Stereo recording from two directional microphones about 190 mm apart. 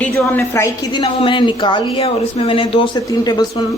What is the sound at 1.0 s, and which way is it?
Speech, 25° left (ahead or behind).